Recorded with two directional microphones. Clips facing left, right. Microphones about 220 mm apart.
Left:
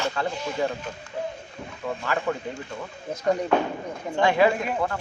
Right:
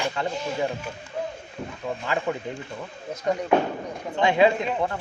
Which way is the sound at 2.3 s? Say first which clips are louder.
Left 1 dB; 20° right (ahead or behind).